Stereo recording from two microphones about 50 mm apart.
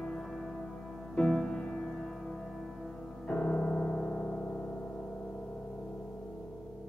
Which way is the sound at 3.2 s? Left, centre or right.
Left.